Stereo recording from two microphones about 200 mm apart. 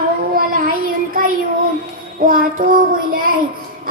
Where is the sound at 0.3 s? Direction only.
45° right (ahead or behind).